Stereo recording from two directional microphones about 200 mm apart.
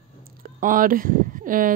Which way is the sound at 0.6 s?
45° right (ahead or behind).